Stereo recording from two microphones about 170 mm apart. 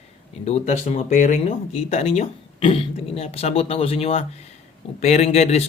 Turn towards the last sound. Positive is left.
turn(degrees=40)  # may be behind; listen again after turning